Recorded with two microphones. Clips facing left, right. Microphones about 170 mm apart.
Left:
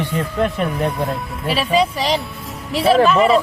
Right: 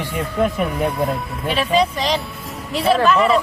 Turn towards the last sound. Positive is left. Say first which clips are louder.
# left 2 dB
turn(degrees=0)  # may be behind; listen again after turning